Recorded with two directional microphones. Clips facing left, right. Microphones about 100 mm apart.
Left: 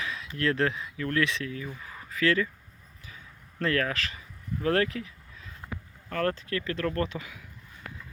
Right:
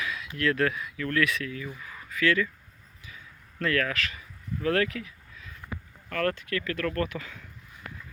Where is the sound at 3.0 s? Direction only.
35° left (ahead or behind).